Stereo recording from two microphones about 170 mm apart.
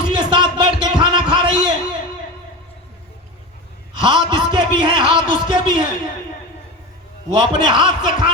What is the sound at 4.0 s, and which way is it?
A man's voice, 30° right (ahead or behind).